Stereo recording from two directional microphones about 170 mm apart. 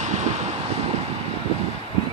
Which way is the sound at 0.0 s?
45° right (ahead or behind).